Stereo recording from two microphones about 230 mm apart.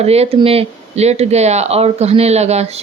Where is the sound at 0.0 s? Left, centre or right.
Right.